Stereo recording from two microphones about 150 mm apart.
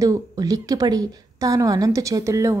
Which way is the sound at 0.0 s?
25° right (ahead or behind).